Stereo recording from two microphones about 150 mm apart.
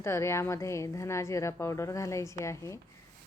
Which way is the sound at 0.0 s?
20° left (ahead or behind).